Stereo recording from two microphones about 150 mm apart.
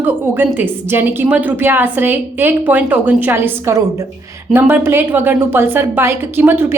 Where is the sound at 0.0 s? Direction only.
15° right (ahead or behind).